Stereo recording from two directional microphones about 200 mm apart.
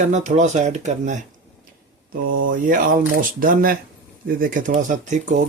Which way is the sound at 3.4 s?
45° right (ahead or behind).